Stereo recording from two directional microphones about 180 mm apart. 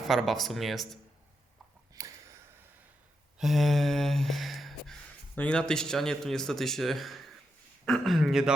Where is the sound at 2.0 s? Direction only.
20° right (ahead or behind).